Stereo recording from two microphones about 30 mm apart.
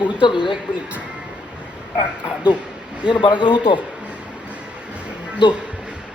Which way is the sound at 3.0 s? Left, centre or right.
Right.